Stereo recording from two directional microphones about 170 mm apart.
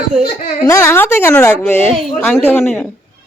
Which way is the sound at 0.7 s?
15° left (ahead or behind).